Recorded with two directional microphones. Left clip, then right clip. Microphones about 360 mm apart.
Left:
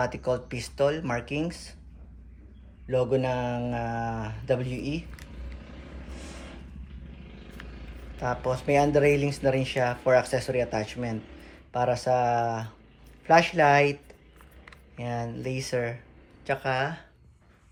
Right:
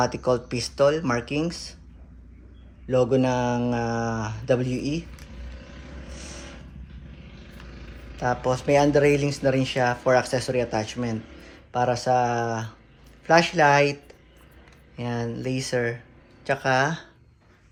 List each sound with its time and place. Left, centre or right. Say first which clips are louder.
0.0 s speech: right 5 dB; centre
2.9 s speech: right 4 dB; centre
8.2 s speech: right 4 dB; centre